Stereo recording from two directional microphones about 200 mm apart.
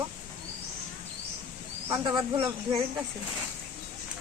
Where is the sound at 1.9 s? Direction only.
20° right (ahead or behind).